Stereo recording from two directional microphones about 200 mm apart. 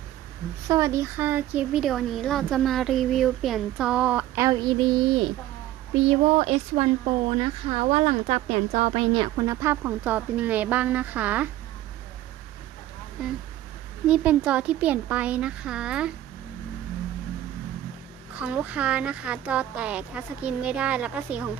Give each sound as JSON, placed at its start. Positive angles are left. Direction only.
{"t": 0.7, "sound": "speech", "side_deg": -15}
{"t": 13.2, "sound": "speech", "side_deg": -5}
{"t": 18.3, "sound": "speech", "side_deg": -5}